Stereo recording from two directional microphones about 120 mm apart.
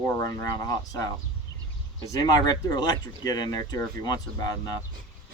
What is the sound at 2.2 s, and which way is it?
Speech, 35° left (ahead or behind).